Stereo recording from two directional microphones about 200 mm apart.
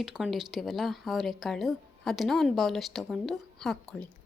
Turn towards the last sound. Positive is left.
turn(degrees=0)  # may be behind; listen again after turning